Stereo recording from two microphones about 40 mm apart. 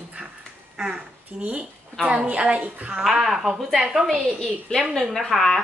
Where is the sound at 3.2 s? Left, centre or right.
Centre.